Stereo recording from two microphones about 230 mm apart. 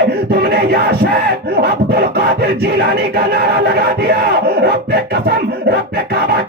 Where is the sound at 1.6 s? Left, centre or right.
Right.